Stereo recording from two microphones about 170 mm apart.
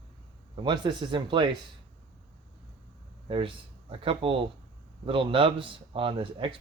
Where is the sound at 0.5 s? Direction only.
25° right (ahead or behind).